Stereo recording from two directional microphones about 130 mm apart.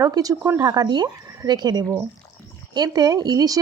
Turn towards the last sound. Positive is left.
turn(degrees=-25)  # may be behind; listen again after turning